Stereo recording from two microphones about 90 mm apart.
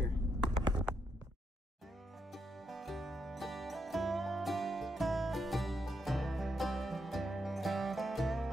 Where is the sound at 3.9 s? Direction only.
Centre (ahead or behind).